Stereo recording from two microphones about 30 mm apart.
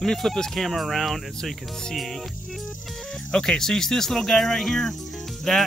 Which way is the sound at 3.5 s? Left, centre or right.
Centre.